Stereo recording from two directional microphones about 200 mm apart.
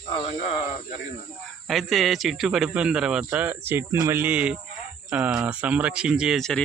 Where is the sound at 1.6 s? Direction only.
Centre (ahead or behind).